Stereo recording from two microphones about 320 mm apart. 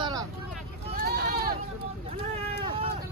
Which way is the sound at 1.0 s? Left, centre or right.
Right.